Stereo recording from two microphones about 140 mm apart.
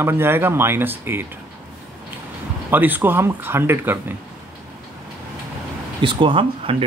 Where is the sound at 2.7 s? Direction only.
15° right (ahead or behind).